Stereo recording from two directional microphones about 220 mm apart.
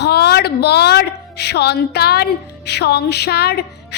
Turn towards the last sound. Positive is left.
turn(degrees=45)  # may be behind; listen again after turning